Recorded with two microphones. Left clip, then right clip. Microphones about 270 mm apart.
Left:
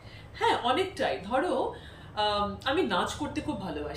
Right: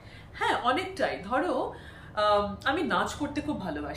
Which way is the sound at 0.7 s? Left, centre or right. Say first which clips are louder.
Even; centre.